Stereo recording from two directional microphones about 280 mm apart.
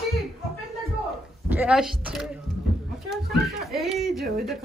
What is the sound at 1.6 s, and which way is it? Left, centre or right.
A woman's voice, centre.